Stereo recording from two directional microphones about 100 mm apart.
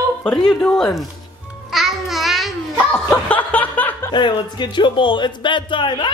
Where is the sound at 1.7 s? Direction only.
Centre (ahead or behind).